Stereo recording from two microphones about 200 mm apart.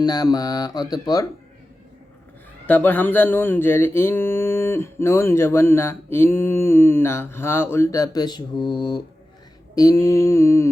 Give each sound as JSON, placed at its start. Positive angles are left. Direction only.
{"t": 0.0, "sound": "mantra", "side_deg": 20}
{"t": 2.6, "sound": "mantra", "side_deg": 10}